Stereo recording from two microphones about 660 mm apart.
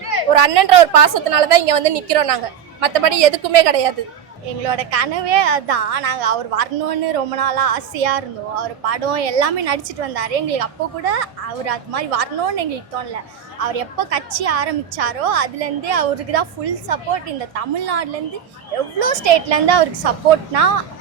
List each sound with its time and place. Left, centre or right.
0.1 s a sound: right
0.5 s a woman's voice: right
13.7 s a woman's voice: right